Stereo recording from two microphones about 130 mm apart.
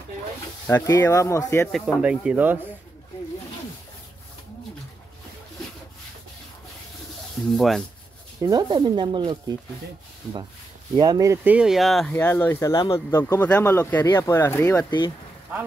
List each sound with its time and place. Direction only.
0.7 s speech: 25° left (ahead or behind)
2.0 s speech: 10° right (ahead or behind)
7.5 s speech: centre (ahead or behind)
8.4 s speech: 30° right (ahead or behind)
11.0 s speech: 30° right (ahead or behind)
11.4 s speech: 5° right (ahead or behind)
12.1 s speech: 15° left (ahead or behind)